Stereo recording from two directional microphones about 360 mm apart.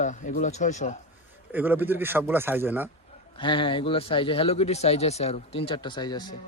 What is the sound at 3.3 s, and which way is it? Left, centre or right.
Speech, centre.